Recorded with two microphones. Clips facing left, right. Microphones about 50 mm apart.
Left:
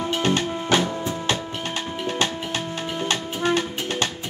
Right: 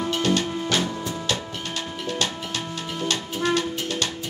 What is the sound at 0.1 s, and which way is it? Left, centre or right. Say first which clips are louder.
Music: left 1 dB; left.